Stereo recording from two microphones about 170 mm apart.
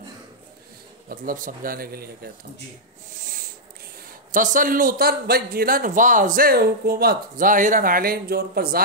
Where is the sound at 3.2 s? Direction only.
55° right (ahead or behind).